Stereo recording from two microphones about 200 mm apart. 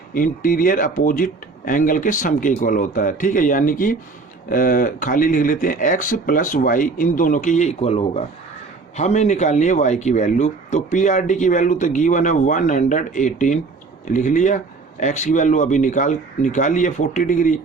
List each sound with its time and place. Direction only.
0.1 s speech: 45° left (ahead or behind)